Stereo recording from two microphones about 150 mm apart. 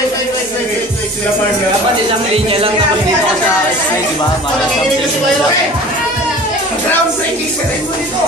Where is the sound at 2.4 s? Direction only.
40° right (ahead or behind).